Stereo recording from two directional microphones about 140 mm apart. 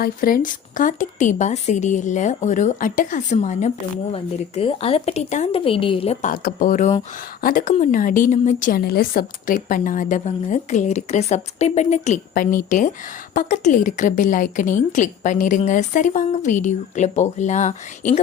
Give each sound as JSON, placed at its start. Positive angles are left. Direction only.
{"t": 0.0, "sound": "a woman's voice", "side_deg": 90}
{"t": 4.1, "sound": "speech", "side_deg": 45}
{"t": 6.2, "sound": "a woman's voice", "side_deg": 85}
{"t": 13.3, "sound": "a woman's voice", "side_deg": 65}